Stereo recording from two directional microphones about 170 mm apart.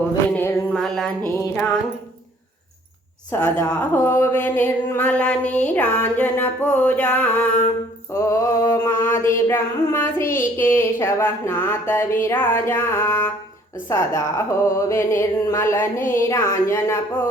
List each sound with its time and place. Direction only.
0.3 s a sound: 10° left (ahead or behind)
1.4 s mantra: 15° left (ahead or behind)
3.6 s mantra: 10° left (ahead or behind)